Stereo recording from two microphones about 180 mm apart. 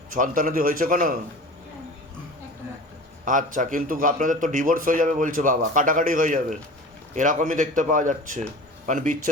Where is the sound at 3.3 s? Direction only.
45° right (ahead or behind).